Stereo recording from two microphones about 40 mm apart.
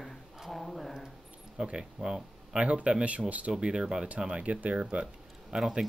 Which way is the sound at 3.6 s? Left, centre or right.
Centre.